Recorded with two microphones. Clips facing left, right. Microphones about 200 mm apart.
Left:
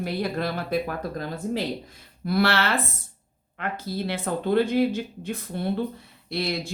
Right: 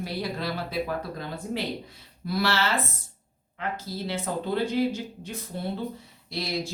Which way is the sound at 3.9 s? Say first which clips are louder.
Left 4 dB; 60° left (ahead or behind).